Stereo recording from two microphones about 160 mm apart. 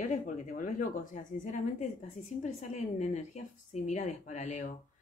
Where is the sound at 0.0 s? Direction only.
50° left (ahead or behind).